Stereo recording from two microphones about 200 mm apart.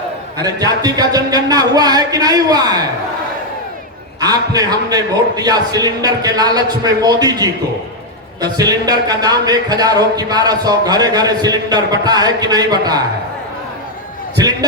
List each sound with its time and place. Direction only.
0.3 s speech: 20° right (ahead or behind)
4.2 s speech: 20° right (ahead or behind)